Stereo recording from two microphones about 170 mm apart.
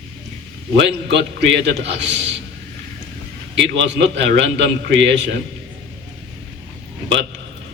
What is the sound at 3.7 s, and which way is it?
A man's voice, 90° right.